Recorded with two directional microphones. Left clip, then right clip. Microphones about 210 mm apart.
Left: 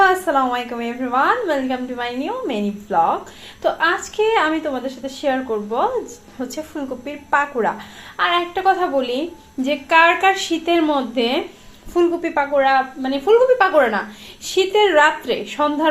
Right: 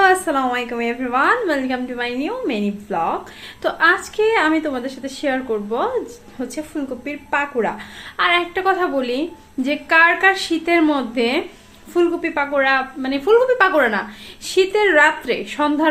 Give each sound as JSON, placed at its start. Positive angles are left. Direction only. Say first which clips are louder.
{"t": 0.0, "sound": "a woman's voice", "louder": "even", "side_deg": -15}